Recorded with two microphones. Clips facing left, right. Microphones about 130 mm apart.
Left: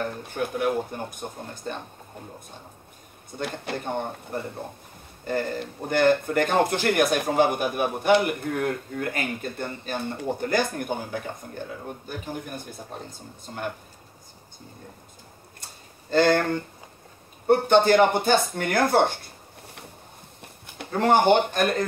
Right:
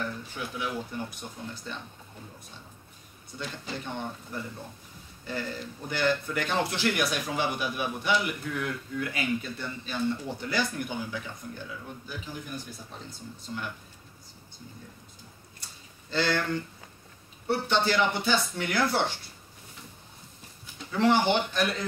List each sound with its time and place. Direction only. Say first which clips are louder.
0.0 s speech: left 6 dB; 50° left (ahead or behind)
15.6 s a sound: left 4 dB; 50° left (ahead or behind)
17.5 s speech: left 9 dB; 50° left (ahead or behind)